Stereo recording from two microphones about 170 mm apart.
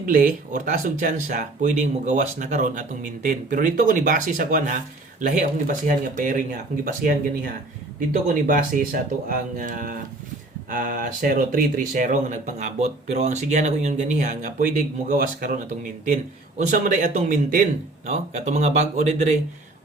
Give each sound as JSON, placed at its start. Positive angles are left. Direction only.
{"t": 0.0, "sound": "speech", "side_deg": -55}